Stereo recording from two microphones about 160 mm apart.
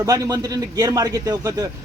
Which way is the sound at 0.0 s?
20° right (ahead or behind).